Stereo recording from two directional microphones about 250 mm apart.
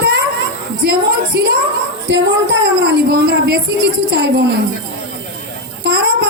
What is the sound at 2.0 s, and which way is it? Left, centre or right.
A woman's voice, right.